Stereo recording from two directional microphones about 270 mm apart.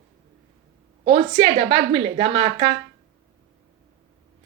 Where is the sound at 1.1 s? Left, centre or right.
Centre.